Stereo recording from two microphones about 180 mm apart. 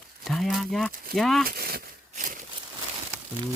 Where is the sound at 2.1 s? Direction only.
45° right (ahead or behind).